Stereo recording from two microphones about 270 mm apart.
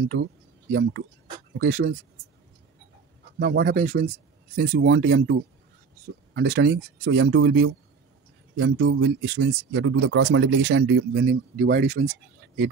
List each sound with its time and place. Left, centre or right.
0.7 s speech: right
3.3 s speech: right